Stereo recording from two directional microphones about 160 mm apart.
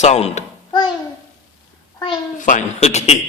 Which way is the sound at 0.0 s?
40° left (ahead or behind).